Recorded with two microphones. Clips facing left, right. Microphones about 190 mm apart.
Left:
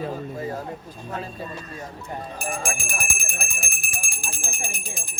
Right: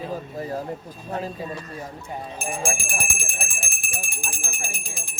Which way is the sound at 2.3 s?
25° right (ahead or behind).